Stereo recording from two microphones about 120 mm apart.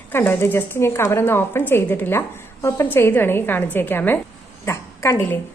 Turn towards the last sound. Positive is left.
turn(degrees=25)  # may be behind; listen again after turning